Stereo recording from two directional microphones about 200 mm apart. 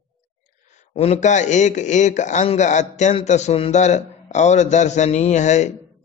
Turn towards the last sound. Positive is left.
turn(degrees=35)  # may be behind; listen again after turning